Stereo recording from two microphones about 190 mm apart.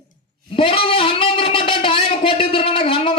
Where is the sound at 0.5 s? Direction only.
30° left (ahead or behind).